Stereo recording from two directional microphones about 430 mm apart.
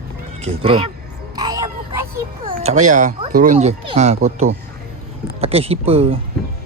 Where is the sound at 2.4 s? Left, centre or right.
Centre.